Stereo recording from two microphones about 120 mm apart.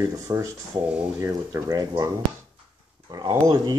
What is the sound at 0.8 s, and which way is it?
Speech, 10° right (ahead or behind).